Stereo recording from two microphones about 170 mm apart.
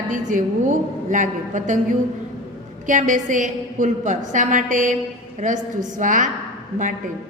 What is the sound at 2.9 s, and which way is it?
A man's voice, 50° right (ahead or behind).